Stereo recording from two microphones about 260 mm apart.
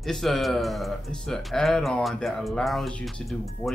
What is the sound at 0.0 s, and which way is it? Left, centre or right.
Speech, centre.